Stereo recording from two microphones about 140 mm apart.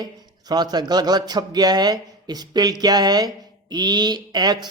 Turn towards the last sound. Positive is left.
turn(degrees=-30)  # may be behind; listen again after turning